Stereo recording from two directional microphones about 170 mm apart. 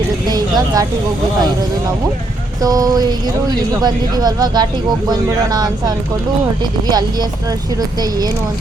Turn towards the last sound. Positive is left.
turn(degrees=-25)  # may be behind; listen again after turning